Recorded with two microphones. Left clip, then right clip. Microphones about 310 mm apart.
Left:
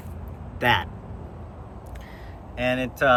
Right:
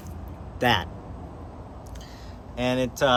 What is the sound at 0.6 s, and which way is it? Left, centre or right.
Speech, centre.